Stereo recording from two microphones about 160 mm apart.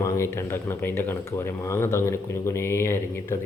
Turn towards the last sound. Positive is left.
turn(degrees=15)  # may be behind; listen again after turning